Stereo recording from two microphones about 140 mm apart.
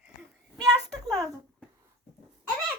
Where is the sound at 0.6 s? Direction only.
25° right (ahead or behind).